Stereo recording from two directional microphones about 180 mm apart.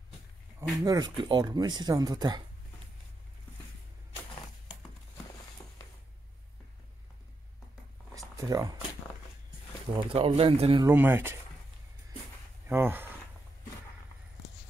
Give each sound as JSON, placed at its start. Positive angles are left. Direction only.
{"t": 0.6, "sound": "speech", "side_deg": -20}
{"t": 5.6, "sound": "a sound", "side_deg": 20}
{"t": 8.1, "sound": "a sound", "side_deg": -20}
{"t": 10.0, "sound": "speech", "side_deg": -30}
{"t": 10.8, "sound": "speech", "side_deg": -10}
{"t": 12.6, "sound": "speech", "side_deg": -10}